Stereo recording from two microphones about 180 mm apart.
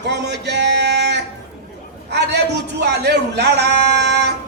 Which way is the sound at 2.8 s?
70° right (ahead or behind).